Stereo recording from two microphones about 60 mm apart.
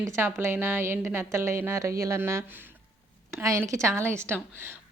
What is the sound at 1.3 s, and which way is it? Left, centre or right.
Speech, right.